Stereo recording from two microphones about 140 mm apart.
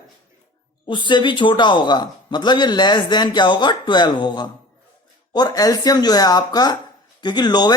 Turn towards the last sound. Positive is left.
turn(degrees=30)  # may be behind; listen again after turning